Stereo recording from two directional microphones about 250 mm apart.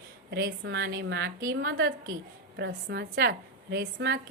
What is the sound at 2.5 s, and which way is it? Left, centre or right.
A woman's voice, right.